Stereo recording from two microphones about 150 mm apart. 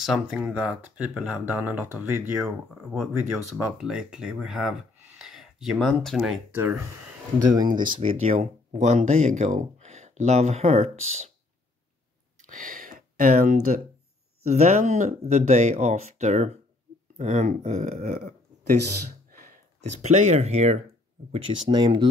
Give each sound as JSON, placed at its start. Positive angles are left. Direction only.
{"t": 0.0, "sound": "speech", "side_deg": -5}
{"t": 2.4, "sound": "speech", "side_deg": 0}
{"t": 6.5, "sound": "speech", "side_deg": -10}
{"t": 7.3, "sound": "speech", "side_deg": -25}
{"t": 12.4, "sound": "a sound", "side_deg": -60}
{"t": 14.5, "sound": "speech", "side_deg": -50}
{"t": 18.8, "sound": "a sound", "side_deg": -70}
{"t": 19.8, "sound": "speech", "side_deg": -50}
{"t": 21.3, "sound": "speech", "side_deg": -35}